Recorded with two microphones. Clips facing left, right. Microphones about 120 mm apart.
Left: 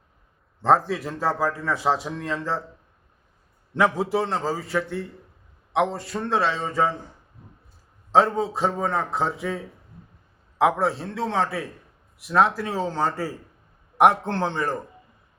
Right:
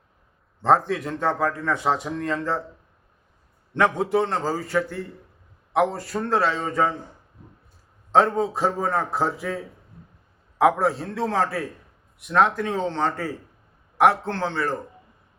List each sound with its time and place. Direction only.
0.6 s a man's voice: centre (ahead or behind)
3.8 s a man's voice: 5° left (ahead or behind)
8.1 s a man's voice: centre (ahead or behind); by 14.8 s 15° left (ahead or behind)